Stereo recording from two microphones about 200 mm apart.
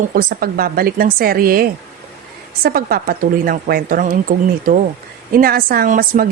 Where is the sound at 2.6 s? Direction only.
50° right (ahead or behind).